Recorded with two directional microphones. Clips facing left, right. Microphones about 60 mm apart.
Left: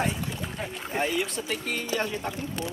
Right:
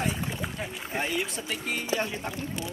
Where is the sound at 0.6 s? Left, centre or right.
Centre.